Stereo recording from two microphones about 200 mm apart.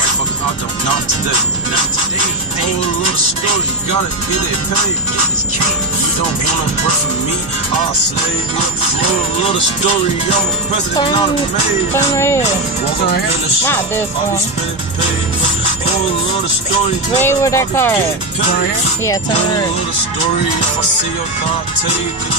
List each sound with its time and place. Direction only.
11.9 s speech: 15° left (ahead or behind)
17.2 s speech: 15° left (ahead or behind)
19.0 s speech: 20° left (ahead or behind)